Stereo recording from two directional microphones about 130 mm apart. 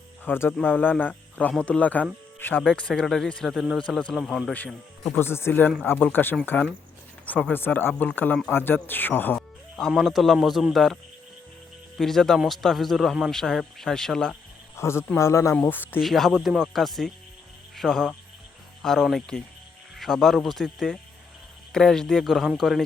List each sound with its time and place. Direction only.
0.3 s a man's voice: 20° left (ahead or behind); by 3.8 s centre (ahead or behind)
3.8 s speech: 10° left (ahead or behind)
4.5 s speech: 10° left (ahead or behind)
11.9 s speech: 5° left (ahead or behind)
14.8 s a man's voice: 20° left (ahead or behind)
16.0 s speech: centre (ahead or behind)